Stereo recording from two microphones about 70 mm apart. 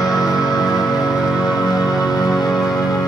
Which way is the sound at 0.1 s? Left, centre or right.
Centre.